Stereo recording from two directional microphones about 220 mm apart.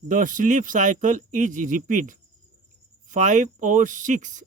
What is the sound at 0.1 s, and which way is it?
Speech, 35° right (ahead or behind).